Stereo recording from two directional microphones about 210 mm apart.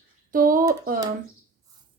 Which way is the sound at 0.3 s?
40° right (ahead or behind).